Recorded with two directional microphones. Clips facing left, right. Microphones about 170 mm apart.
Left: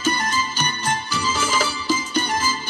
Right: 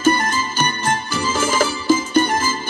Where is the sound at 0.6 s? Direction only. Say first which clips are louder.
Right 4 dB; 50° right (ahead or behind).